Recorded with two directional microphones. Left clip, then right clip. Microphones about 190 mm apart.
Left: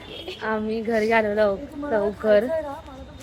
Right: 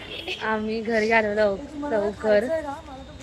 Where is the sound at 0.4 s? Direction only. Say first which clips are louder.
Left 1 dB; 5° left (ahead or behind).